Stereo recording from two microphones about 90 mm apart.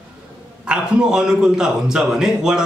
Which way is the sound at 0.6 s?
5° right (ahead or behind).